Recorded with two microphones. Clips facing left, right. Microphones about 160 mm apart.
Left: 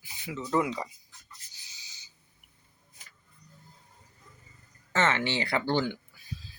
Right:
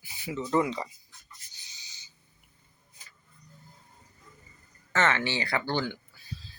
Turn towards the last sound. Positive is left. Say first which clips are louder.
# left 2 dB
turn(degrees=20)  # may be behind; listen again after turning